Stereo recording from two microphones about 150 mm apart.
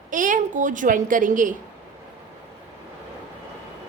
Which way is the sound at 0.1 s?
60° right (ahead or behind).